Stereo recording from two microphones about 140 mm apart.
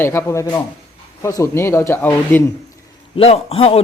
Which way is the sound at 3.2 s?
45° left (ahead or behind).